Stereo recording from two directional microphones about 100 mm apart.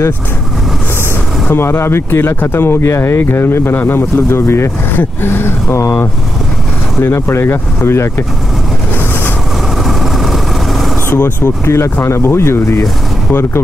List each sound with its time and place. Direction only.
1.5 s speech: 25° left (ahead or behind)
9.8 s vehicle: centre (ahead or behind)
11.1 s speech: 25° left (ahead or behind)